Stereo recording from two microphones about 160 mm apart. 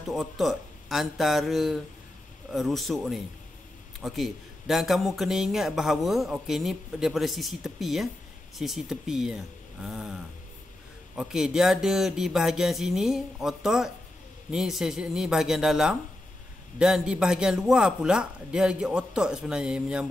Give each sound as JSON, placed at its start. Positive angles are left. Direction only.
{"t": 0.1, "sound": "a man's voice", "side_deg": 0}